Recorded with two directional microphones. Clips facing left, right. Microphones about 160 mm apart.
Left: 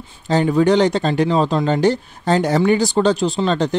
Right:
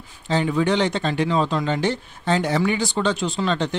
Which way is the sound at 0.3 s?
40° left (ahead or behind).